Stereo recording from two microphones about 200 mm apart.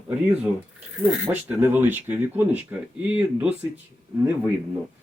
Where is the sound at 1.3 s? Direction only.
10° right (ahead or behind).